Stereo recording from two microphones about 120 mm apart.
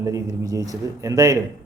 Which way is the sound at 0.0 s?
30° right (ahead or behind).